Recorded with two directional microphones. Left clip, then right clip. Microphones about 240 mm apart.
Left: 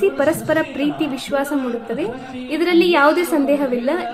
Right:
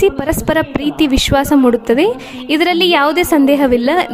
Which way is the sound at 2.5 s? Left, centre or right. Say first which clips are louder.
Right 4 dB; right.